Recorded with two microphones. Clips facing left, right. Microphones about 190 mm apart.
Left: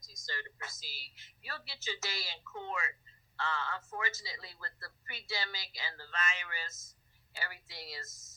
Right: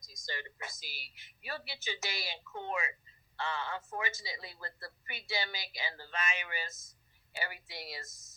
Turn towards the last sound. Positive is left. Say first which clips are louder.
# right 4 dB
turn(degrees=-20)  # may be behind; listen again after turning